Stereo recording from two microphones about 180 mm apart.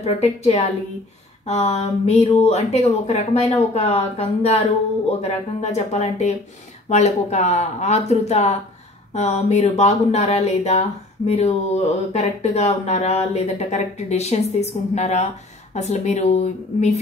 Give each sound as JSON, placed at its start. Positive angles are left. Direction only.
{"t": 0.0, "sound": "speech", "side_deg": 35}